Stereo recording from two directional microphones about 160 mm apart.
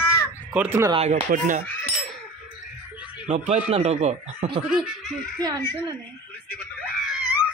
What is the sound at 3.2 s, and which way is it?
Speech, 50° right (ahead or behind).